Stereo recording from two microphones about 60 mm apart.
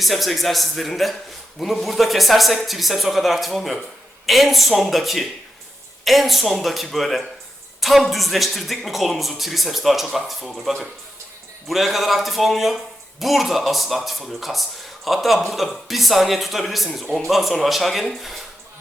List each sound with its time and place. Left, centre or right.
0.0 s speech: centre